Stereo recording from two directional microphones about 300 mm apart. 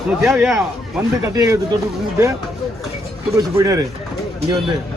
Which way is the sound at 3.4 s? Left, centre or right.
Centre.